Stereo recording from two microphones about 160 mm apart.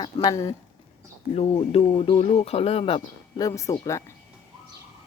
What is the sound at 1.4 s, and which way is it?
Speech, 40° left (ahead or behind).